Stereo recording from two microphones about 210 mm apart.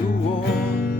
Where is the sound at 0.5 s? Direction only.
45° left (ahead or behind).